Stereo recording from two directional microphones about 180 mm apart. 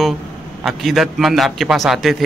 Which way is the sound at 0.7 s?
Centre (ahead or behind).